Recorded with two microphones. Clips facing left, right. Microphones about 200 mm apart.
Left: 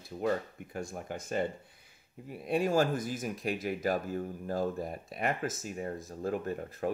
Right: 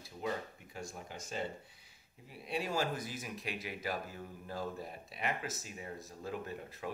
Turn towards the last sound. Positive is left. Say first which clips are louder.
# left 8 dB
turn(degrees=50)  # may be behind; listen again after turning